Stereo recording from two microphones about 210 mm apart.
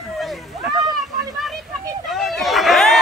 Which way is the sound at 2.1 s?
Centre (ahead or behind).